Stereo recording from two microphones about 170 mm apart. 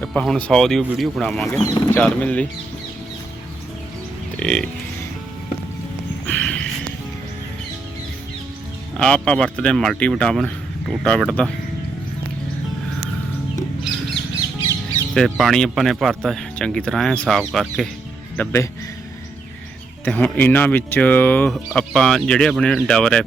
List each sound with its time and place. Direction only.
0.0 s speech: 5° left (ahead or behind)
1.6 s speech: 20° left (ahead or behind)
2.0 s speech: 10° left (ahead or behind)
4.4 s speech: 5° left (ahead or behind)
6.2 s a sound: 5° left (ahead or behind)
9.0 s speech: 5° left (ahead or behind)
15.1 s speech: centre (ahead or behind)
18.3 s speech: 15° left (ahead or behind)
20.1 s speech: 10° left (ahead or behind)